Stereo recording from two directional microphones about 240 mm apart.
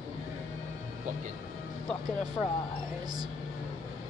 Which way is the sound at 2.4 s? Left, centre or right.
Centre.